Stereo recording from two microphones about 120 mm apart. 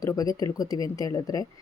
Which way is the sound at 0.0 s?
30° left (ahead or behind).